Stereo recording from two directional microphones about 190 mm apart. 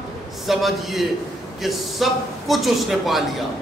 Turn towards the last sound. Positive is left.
turn(degrees=0)  # may be behind; listen again after turning